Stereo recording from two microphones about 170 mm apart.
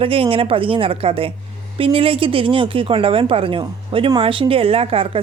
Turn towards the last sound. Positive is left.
turn(degrees=-30)  # may be behind; listen again after turning